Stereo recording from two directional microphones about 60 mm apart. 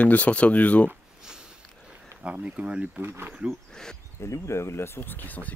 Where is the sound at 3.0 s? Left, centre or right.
Right.